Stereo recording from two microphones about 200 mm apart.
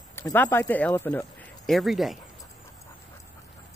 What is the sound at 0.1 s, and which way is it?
Speech, 10° left (ahead or behind).